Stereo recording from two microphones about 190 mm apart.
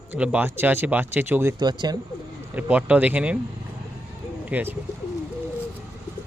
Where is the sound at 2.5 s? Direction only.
10° right (ahead or behind).